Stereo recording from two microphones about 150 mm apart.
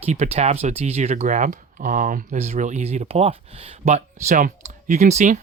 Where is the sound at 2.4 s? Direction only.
50° right (ahead or behind).